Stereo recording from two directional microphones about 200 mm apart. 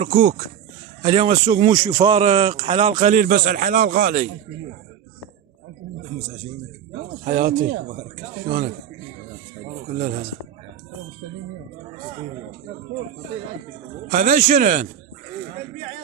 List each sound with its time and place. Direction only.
0.0 s speech: 35° right (ahead or behind)
7.3 s speech: 35° right (ahead or behind)
9.8 s speech: 35° right (ahead or behind)
14.1 s speech: 40° right (ahead or behind)